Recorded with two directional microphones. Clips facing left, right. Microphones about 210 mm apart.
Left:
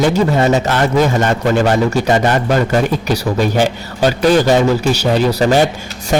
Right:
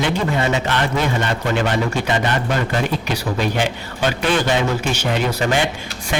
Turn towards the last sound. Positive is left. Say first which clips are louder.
# left 7 dB
turn(degrees=45)  # may be behind; listen again after turning